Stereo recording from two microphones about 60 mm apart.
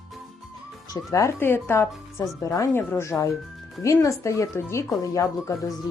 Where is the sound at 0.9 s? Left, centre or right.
Left.